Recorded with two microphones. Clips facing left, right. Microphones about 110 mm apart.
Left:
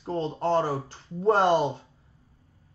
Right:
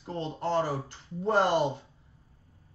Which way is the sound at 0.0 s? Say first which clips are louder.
Left 5 dB; 35° left (ahead or behind).